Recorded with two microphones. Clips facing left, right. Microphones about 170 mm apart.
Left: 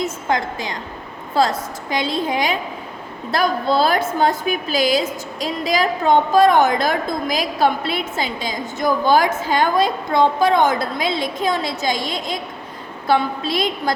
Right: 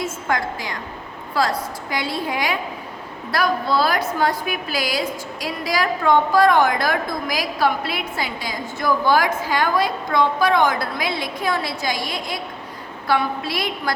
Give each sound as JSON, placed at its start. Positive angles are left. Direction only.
{"t": 0.0, "sound": "a woman's voice", "side_deg": 20}